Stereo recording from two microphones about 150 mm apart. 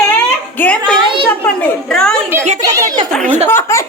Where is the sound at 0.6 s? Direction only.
10° left (ahead or behind).